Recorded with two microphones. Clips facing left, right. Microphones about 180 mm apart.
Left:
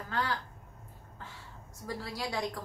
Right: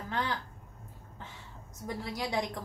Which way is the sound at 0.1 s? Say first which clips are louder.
Even; 20° right (ahead or behind).